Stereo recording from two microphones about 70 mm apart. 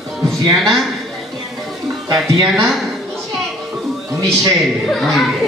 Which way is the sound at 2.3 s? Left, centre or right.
Right.